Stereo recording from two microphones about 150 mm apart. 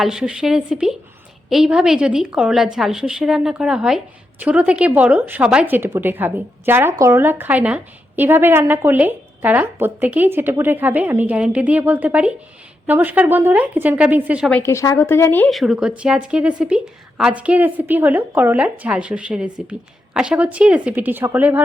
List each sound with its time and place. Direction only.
0.0 s a woman's voice: 5° right (ahead or behind)
14.6 s speech: 20° left (ahead or behind)
15.4 s a woman's voice: centre (ahead or behind)